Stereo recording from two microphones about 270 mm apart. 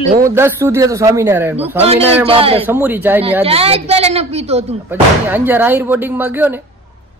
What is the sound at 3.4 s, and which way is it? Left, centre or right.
A woman's voice, right.